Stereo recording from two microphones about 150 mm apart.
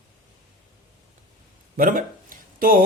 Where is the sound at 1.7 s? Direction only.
65° right (ahead or behind).